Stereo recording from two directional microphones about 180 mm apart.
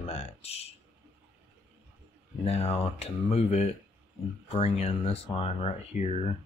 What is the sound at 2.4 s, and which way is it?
Speech, 35° left (ahead or behind).